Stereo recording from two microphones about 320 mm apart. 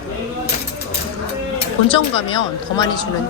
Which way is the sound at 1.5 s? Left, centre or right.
Centre.